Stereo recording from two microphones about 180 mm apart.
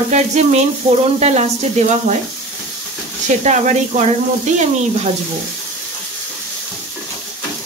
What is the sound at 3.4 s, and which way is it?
Frying, 40° right (ahead or behind).